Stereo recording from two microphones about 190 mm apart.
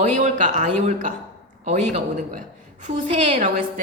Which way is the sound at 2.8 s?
30° right (ahead or behind).